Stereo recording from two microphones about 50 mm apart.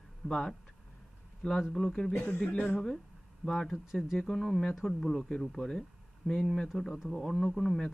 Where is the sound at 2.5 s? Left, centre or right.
Left.